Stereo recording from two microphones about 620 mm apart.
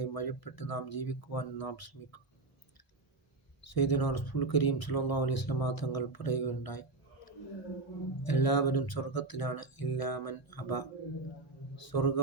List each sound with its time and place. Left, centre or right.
0.0 s speech: left
3.6 s speech: left
8.2 s speech: left